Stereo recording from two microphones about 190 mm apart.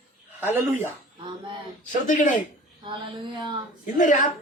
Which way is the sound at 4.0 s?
40° left (ahead or behind).